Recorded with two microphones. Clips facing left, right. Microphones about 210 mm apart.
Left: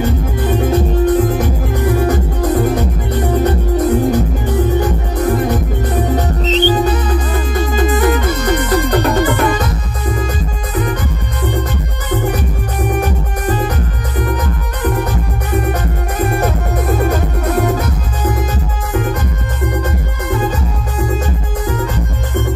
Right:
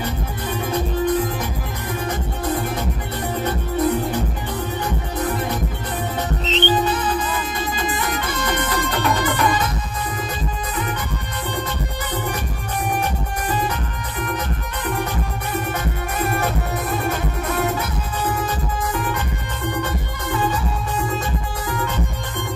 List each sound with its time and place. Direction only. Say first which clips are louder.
0.0 s music: left 9 dB; 45° left (ahead or behind)
14.2 s music: left 5 dB; 40° left (ahead or behind)